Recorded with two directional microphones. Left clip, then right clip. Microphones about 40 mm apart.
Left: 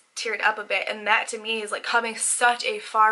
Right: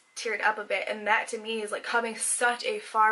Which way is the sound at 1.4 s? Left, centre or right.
Right.